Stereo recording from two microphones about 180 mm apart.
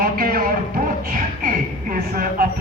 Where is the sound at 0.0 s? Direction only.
55° right (ahead or behind).